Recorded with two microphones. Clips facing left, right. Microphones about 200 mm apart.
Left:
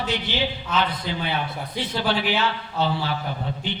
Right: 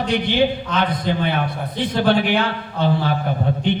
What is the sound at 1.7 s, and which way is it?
Speech, 10° left (ahead or behind).